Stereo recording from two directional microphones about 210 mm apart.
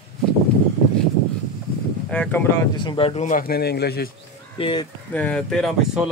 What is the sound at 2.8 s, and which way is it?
Speech, 25° left (ahead or behind).